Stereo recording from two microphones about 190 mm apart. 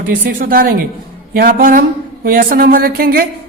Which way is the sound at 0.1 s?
50° right (ahead or behind).